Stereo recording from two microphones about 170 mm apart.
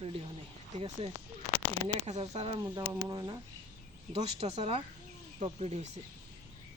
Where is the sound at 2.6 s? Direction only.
20° right (ahead or behind).